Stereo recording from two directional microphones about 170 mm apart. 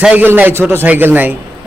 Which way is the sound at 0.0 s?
10° right (ahead or behind).